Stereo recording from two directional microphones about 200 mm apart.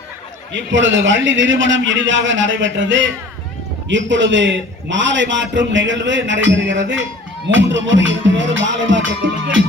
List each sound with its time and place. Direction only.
0.5 s a man's voice: 70° right (ahead or behind)